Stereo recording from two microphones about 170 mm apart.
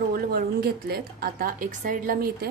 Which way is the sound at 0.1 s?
65° right (ahead or behind).